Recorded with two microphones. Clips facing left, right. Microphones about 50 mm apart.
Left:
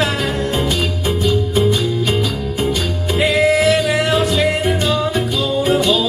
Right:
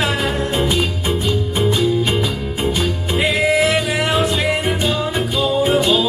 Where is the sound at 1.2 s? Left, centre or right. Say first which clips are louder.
Left 5 dB; centre.